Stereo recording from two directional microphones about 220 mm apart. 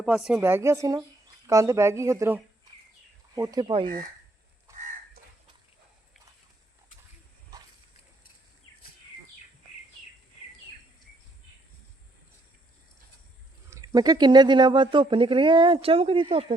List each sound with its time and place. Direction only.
0.0 s a woman's voice: 5° right (ahead or behind); by 3.8 s 20° right (ahead or behind)
4.7 s crow: 15° right (ahead or behind)
13.7 s speech: 15° right (ahead or behind)